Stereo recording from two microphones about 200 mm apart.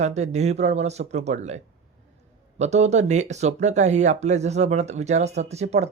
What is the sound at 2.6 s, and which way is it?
Speech, 35° right (ahead or behind).